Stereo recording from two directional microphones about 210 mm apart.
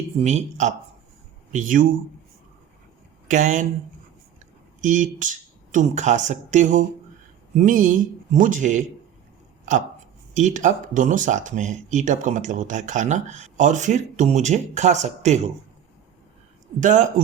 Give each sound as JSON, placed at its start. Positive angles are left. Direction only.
{"t": 0.2, "sound": "speech", "side_deg": -35}
{"t": 3.2, "sound": "speech", "side_deg": -35}
{"t": 4.8, "sound": "speech", "side_deg": -35}
{"t": 10.3, "sound": "speech", "side_deg": -35}
{"t": 16.8, "sound": "speech", "side_deg": -35}